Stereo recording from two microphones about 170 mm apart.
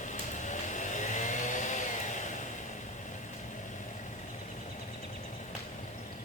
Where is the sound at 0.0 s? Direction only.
45° left (ahead or behind).